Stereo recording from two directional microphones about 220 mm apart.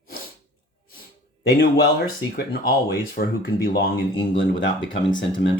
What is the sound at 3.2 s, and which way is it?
Speech, 45° left (ahead or behind).